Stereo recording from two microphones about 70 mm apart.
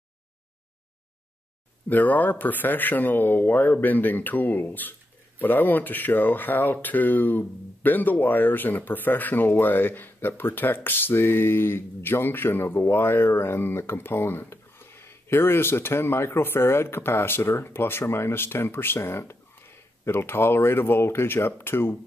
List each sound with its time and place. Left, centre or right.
1.9 s speech: left